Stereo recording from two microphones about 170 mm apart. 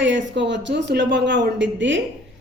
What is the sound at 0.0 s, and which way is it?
A man's voice, 90° right.